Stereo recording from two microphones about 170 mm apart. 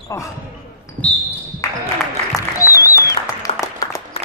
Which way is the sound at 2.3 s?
20° left (ahead or behind).